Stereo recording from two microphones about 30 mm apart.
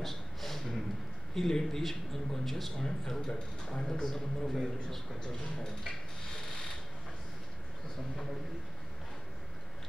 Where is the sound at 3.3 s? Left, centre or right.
Left.